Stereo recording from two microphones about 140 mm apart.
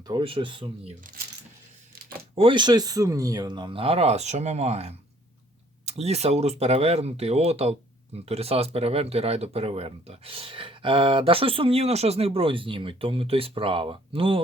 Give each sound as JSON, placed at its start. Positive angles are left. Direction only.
{"t": 0.1, "sound": "speech", "side_deg": -40}
{"t": 2.3, "sound": "speech", "side_deg": -40}